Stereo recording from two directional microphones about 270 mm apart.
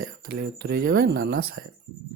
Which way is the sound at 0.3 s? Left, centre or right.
Right.